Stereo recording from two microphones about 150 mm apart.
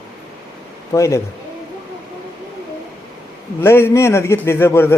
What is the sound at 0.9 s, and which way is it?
Speech, 20° left (ahead or behind).